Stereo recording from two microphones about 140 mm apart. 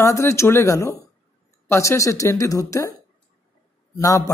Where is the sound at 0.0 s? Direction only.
20° left (ahead or behind).